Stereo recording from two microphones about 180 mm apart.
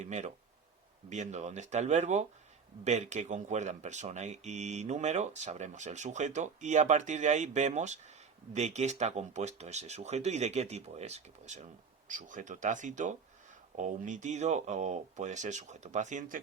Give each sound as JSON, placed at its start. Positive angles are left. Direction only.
{"t": 0.0, "sound": "speech", "side_deg": -40}